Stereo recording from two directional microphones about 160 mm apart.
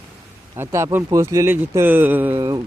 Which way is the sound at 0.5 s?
15° right (ahead or behind).